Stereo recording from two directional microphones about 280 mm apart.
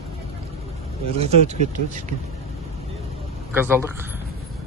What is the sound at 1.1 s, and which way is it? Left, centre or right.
Speech, right.